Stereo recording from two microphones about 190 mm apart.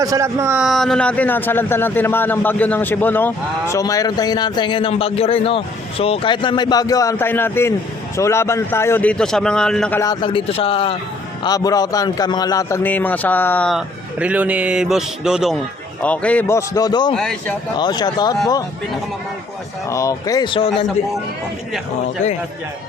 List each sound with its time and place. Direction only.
0.0 s a man's voice: 15° right (ahead or behind); by 10.0 s 5° left (ahead or behind)
10.0 s a man's voice: 20° left (ahead or behind)
11.4 s a man's voice: 20° left (ahead or behind); by 15.5 s 5° right (ahead or behind)
16.0 s a man's voice: 5° left (ahead or behind)
17.2 s a man's voice: centre (ahead or behind)
17.7 s a man's voice: 25° left (ahead or behind)
19.9 s a man's voice: 15° left (ahead or behind)